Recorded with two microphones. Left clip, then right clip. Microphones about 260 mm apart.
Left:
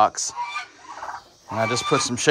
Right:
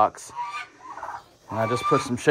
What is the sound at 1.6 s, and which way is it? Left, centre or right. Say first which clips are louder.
Speech: left 1 dB; centre.